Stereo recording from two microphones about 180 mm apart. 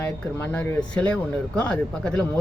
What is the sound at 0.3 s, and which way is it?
Speech, 10° left (ahead or behind).